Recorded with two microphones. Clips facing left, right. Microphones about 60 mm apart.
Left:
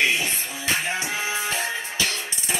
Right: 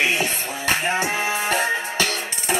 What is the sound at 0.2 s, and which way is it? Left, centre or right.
Music, right.